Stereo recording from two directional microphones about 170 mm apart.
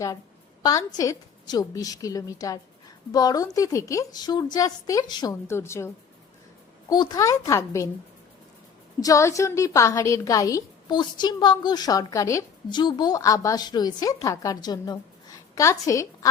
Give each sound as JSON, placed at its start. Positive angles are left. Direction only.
{"t": 0.6, "sound": "a woman's voice", "side_deg": 20}
{"t": 9.0, "sound": "a woman's voice", "side_deg": 20}